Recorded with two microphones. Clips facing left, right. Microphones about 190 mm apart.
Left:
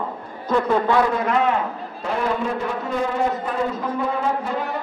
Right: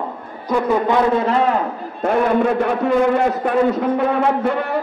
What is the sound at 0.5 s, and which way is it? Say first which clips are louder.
Speech: right 1 dB; 10° right (ahead or behind).